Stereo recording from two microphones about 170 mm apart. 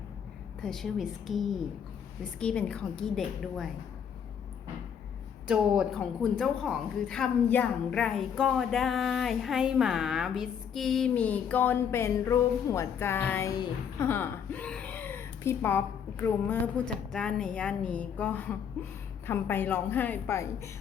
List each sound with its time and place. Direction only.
0.6 s a woman's voice: centre (ahead or behind)
5.5 s a woman's voice: 5° right (ahead or behind); by 20.5 s 15° left (ahead or behind)